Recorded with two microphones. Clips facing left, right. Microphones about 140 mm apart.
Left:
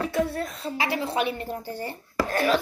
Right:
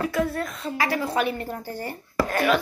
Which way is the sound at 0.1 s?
30° left (ahead or behind).